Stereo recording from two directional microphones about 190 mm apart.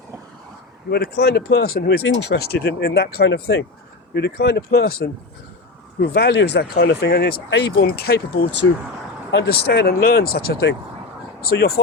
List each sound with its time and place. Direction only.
0.9 s speech: 55° left (ahead or behind)
9.3 s speech: 60° left (ahead or behind)